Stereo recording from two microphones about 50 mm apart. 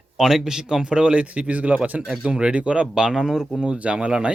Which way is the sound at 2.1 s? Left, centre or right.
Centre.